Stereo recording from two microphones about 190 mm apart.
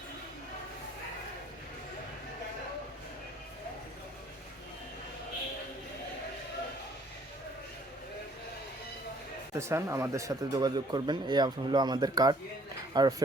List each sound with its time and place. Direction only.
9.6 s speech: 15° right (ahead or behind)